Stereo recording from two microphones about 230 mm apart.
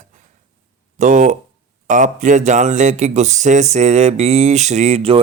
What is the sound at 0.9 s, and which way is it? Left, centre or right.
Speech, right.